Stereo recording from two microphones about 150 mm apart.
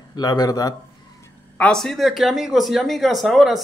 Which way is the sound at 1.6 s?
5° left (ahead or behind).